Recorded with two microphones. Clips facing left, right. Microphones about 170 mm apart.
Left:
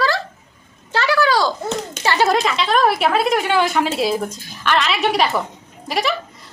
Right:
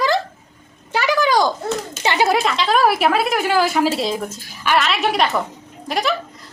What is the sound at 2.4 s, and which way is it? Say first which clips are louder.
A woman's voice: even; centre (ahead or behind).